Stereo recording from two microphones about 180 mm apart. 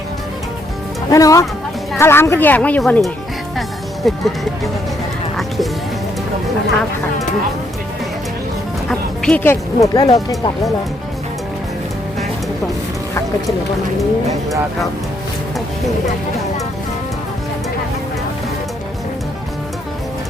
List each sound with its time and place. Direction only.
1.1 s speech: 20° left (ahead or behind); by 4.7 s centre (ahead or behind)
8.9 s speech: 5° left (ahead or behind); by 10.7 s 20° left (ahead or behind)